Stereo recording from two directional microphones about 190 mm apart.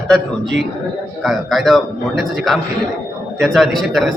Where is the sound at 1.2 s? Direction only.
Centre (ahead or behind).